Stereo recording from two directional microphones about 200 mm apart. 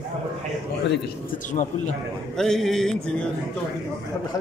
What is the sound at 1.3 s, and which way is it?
Speech, 40° left (ahead or behind).